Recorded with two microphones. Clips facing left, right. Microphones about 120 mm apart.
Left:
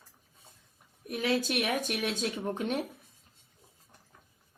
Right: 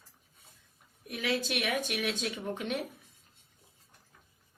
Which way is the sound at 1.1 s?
40° left (ahead or behind).